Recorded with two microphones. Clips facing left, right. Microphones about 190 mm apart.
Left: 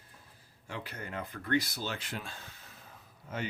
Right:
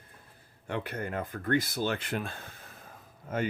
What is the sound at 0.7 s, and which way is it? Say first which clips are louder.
Speech: right 7 dB; 55° right (ahead or behind).